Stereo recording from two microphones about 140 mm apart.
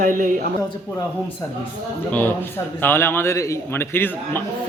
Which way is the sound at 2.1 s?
15° left (ahead or behind).